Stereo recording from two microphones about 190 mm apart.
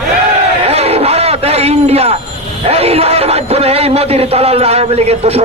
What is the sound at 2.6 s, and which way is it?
A man's voice, 30° right (ahead or behind).